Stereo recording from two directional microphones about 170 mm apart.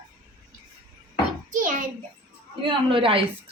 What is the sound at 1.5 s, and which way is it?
Speech, 50° right (ahead or behind).